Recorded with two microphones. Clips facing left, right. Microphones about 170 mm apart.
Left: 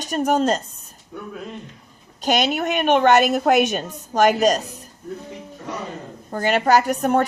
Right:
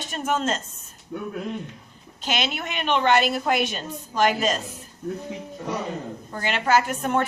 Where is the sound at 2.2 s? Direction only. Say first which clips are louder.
Left 8 dB; 40° left (ahead or behind).